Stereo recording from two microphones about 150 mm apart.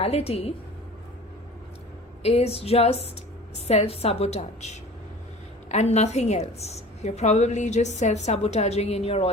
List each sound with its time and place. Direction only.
0.0 s a woman's voice: 40° left (ahead or behind)
2.2 s a woman's voice: 40° left (ahead or behind)